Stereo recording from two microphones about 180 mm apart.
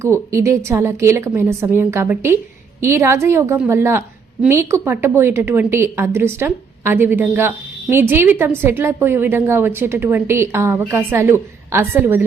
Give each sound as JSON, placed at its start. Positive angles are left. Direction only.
{"t": 0.0, "sound": "a woman's voice", "side_deg": -15}